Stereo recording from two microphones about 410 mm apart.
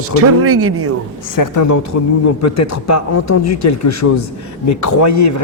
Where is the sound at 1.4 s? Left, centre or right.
Left.